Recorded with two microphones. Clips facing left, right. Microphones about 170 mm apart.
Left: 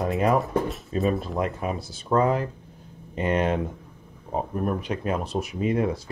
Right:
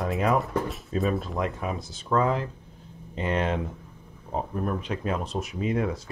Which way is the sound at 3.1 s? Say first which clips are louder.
Left 3 dB; 50° left (ahead or behind).